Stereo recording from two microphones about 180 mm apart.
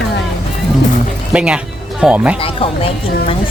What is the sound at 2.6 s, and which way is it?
Speech, 30° left (ahead or behind).